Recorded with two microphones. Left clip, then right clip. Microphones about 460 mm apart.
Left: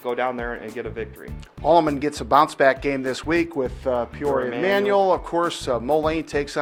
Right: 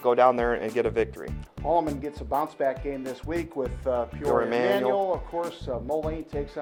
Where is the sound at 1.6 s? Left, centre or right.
Left.